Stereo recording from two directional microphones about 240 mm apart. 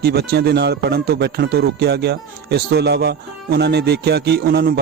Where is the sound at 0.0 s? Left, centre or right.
Right.